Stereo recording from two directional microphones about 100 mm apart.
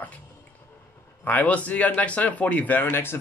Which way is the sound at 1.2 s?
15° left (ahead or behind).